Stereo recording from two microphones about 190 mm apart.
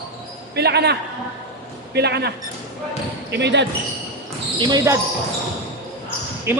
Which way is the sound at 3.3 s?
65° right (ahead or behind).